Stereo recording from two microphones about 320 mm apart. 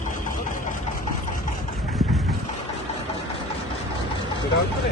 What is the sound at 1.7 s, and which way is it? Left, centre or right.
Vehicle, centre.